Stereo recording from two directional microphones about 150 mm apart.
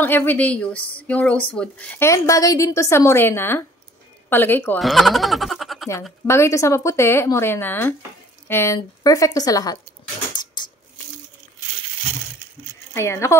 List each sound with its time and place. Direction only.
0.0 s a woman's voice: 15° left (ahead or behind)
4.7 s speech: centre (ahead or behind)
6.2 s a woman's voice: 20° left (ahead or behind)
10.3 s a sound: 30° left (ahead or behind)
12.9 s a woman's voice: 20° left (ahead or behind)